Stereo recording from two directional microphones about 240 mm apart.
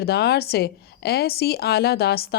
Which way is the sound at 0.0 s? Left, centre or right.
Left.